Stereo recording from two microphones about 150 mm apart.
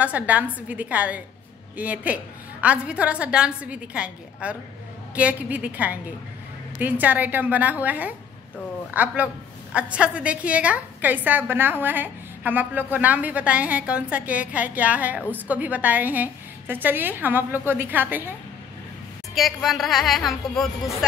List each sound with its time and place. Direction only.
0.0 s a woman's voice: 10° right (ahead or behind)
19.3 s a woman's voice: centre (ahead or behind)